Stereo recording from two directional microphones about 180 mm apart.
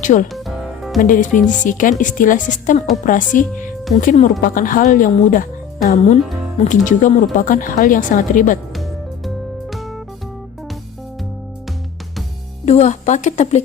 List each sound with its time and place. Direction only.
0.0 s speech: 45° left (ahead or behind)
0.3 s music: centre (ahead or behind)
1.0 s speech: 45° left (ahead or behind)
8.7 s music: centre (ahead or behind)
12.6 s a woman's voice: 40° left (ahead or behind)